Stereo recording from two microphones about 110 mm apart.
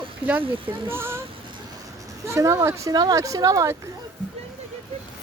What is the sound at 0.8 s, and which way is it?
Speech, 20° right (ahead or behind).